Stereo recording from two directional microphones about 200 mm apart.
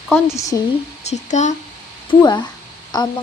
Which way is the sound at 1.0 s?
35° left (ahead or behind).